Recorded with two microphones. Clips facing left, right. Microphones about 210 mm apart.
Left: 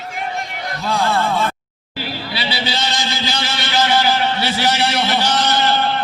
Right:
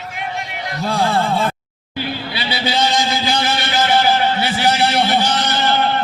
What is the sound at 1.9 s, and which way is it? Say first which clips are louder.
Vehicle: right 2 dB; 55° right (ahead or behind).